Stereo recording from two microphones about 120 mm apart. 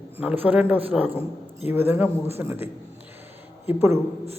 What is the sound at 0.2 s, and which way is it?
A man's voice, 10° right (ahead or behind).